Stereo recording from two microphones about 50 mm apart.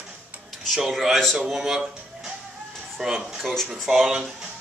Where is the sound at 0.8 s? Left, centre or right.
Centre.